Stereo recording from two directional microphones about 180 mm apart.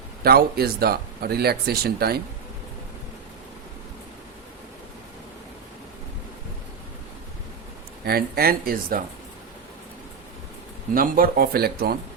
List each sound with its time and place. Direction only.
0.2 s speech: 60° right (ahead or behind)
8.0 s speech: 60° right (ahead or behind)
10.9 s speech: 50° right (ahead or behind)